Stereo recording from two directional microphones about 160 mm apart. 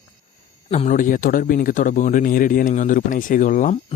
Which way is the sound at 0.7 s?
50° left (ahead or behind).